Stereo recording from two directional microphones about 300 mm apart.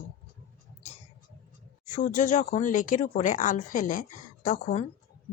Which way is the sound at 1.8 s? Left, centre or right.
Left.